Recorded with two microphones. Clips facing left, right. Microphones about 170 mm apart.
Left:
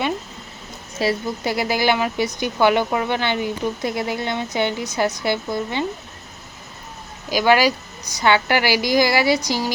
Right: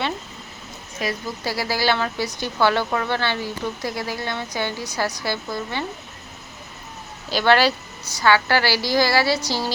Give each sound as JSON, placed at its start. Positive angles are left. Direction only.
{"t": 0.9, "sound": "a woman's voice", "side_deg": 25}
{"t": 7.3, "sound": "a woman's voice", "side_deg": 10}